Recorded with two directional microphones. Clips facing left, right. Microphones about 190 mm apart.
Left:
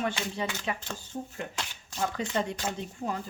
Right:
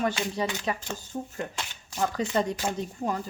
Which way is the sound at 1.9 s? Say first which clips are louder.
Right 4 dB; 40° right (ahead or behind).